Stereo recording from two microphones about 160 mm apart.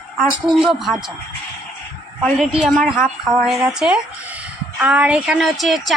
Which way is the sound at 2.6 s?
Centre (ahead or behind).